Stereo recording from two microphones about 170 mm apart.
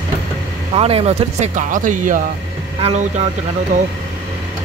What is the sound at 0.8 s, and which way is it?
Speech, 35° right (ahead or behind).